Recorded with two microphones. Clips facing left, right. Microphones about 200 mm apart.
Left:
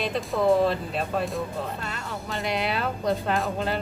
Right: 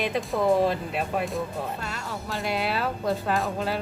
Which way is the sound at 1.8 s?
Centre (ahead or behind).